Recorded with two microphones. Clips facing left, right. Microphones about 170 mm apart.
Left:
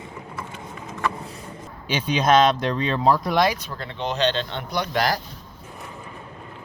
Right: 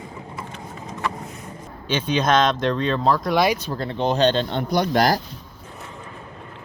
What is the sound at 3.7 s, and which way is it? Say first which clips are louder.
Speech: right 6 dB; 35° right (ahead or behind).